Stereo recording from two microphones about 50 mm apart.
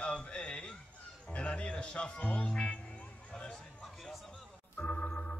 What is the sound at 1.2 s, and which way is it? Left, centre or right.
Speech, left.